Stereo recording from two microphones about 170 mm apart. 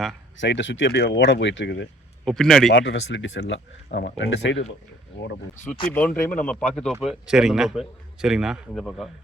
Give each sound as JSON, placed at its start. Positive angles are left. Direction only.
{"t": 0.3, "sound": "speech", "side_deg": 90}
{"t": 2.2, "sound": "a man's voice", "side_deg": 0}
{"t": 2.7, "sound": "speech", "side_deg": 90}
{"t": 5.9, "sound": "a man's voice", "side_deg": 10}